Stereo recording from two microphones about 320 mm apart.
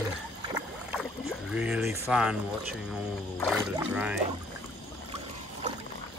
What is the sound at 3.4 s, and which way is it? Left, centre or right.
Speech, centre.